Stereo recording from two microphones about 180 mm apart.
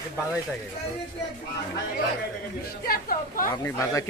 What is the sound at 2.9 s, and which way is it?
Speech, 50° left (ahead or behind).